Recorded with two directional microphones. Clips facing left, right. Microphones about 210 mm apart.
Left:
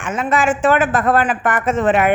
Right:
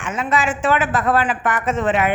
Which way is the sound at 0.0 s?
50° left (ahead or behind).